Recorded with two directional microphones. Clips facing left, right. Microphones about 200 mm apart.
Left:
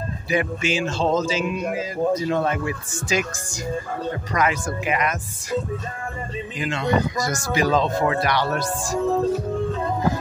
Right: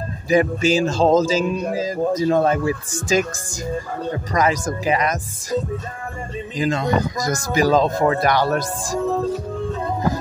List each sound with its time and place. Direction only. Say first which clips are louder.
0.3 s a man's voice: right 6 dB; 35° right (ahead or behind)